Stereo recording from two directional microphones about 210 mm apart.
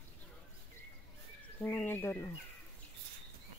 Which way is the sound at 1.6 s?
10° left (ahead or behind).